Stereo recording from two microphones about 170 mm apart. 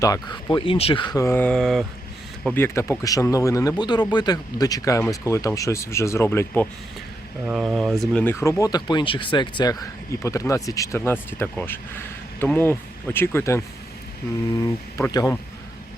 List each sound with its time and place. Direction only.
0.0 s speech: 20° left (ahead or behind)
7.4 s speech: 5° right (ahead or behind)
8.2 s speech: 15° left (ahead or behind)
14.9 s speech: 20° left (ahead or behind)